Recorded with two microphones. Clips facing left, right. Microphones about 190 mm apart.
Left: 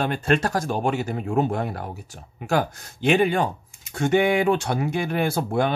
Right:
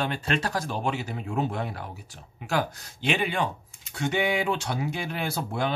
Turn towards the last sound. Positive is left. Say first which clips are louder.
# left 6 dB
turn(degrees=50)  # may be behind; listen again after turning